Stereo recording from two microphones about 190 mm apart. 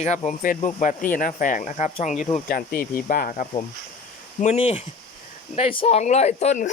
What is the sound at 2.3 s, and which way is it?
Speech, 50° left (ahead or behind).